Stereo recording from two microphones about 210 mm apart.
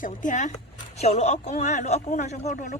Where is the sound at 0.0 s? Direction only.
35° left (ahead or behind).